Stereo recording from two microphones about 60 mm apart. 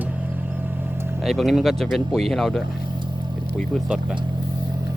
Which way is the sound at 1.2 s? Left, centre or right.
Centre.